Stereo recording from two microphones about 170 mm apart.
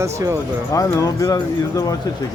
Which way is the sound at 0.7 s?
20° left (ahead or behind).